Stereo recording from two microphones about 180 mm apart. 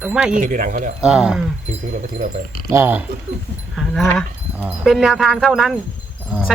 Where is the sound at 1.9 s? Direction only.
45° right (ahead or behind).